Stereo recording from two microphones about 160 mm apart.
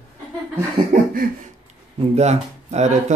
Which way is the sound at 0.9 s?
65° right (ahead or behind).